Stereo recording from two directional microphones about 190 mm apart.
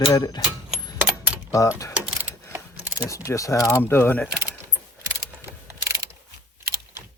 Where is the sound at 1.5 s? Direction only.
15° left (ahead or behind).